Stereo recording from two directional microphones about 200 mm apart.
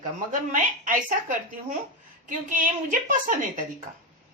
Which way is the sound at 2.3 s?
40° right (ahead or behind).